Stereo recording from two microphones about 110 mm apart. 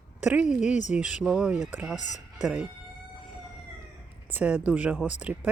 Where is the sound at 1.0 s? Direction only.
10° right (ahead or behind).